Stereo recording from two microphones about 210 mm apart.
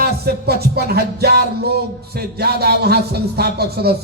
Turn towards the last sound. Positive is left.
turn(degrees=-50)  # may be behind; listen again after turning